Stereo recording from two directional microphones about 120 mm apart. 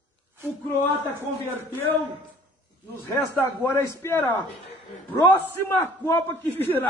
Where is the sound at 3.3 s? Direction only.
20° left (ahead or behind).